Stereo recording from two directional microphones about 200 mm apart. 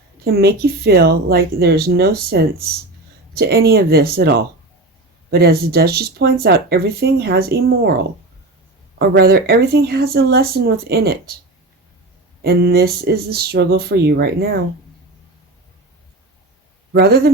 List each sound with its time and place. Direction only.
0.3 s speech: 50° right (ahead or behind)
9.0 s speech: 50° right (ahead or behind)
12.4 s speech: 50° right (ahead or behind)
16.9 s speech: 50° right (ahead or behind)